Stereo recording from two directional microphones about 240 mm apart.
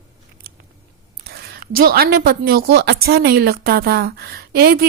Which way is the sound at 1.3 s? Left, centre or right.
Right.